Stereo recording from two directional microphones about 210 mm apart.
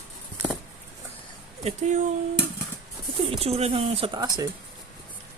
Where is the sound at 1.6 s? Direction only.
35° right (ahead or behind).